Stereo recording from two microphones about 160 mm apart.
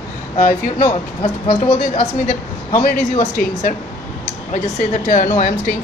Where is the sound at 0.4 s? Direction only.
55° left (ahead or behind).